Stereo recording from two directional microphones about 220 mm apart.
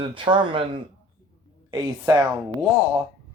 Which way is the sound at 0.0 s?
20° right (ahead or behind).